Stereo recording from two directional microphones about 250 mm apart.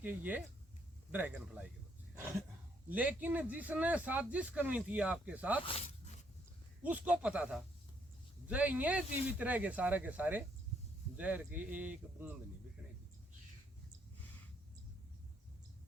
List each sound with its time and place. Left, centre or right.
0.0 s speech: centre
2.1 s a sound: centre
2.9 s a man's voice: centre
5.6 s zipper: left
6.8 s a man's voice: centre